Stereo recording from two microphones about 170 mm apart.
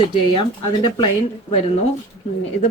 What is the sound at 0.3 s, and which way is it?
A woman's voice, 25° left (ahead or behind).